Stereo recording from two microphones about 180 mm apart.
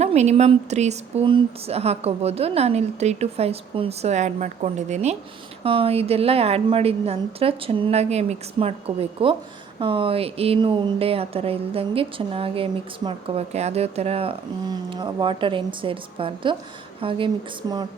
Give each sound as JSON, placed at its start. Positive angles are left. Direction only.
{"t": 0.0, "sound": "a woman's voice", "side_deg": -40}